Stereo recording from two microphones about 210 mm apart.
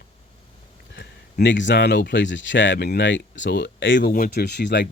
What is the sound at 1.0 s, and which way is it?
Speech, 55° left (ahead or behind).